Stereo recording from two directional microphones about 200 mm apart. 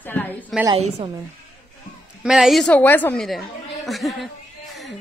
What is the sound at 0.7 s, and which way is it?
Speech, 30° right (ahead or behind).